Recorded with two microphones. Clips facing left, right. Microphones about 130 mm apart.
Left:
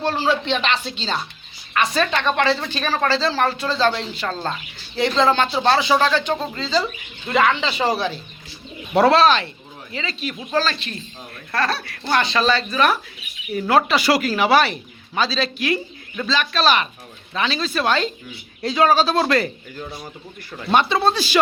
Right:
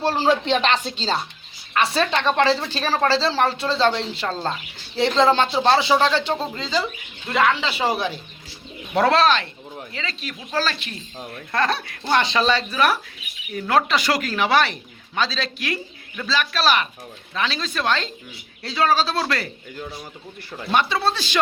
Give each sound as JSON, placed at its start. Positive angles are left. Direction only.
{"t": 0.0, "sound": "speech", "side_deg": -35}
{"t": 7.3, "sound": "speech", "side_deg": 0}
{"t": 9.0, "sound": "speech", "side_deg": 5}
{"t": 13.5, "sound": "speech", "side_deg": 5}
{"t": 20.7, "sound": "speech", "side_deg": 25}